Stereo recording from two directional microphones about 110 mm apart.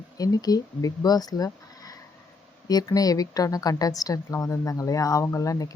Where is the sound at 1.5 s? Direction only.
35° left (ahead or behind).